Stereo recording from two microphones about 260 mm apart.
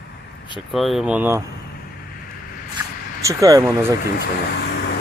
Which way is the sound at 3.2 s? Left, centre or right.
Centre.